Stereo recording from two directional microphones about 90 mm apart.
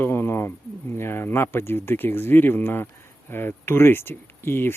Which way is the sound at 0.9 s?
25° left (ahead or behind).